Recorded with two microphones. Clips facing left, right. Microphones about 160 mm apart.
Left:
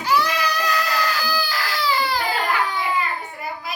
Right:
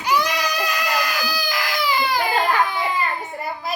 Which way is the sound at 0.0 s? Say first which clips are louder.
Even; 15° right (ahead or behind).